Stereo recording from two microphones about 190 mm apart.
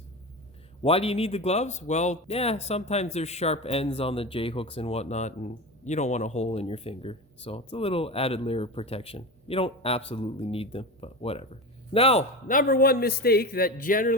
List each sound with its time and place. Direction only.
0.8 s speech: 30° left (ahead or behind)
12.5 s a man's voice: 45° left (ahead or behind)